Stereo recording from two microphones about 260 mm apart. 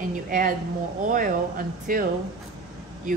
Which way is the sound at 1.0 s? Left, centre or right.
Right.